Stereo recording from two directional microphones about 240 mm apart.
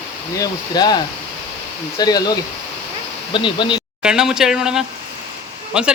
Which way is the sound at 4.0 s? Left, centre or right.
Centre.